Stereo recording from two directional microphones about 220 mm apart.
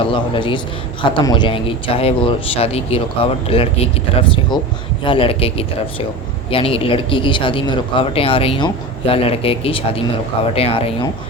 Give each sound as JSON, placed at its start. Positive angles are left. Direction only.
{"t": 0.0, "sound": "speech", "side_deg": 25}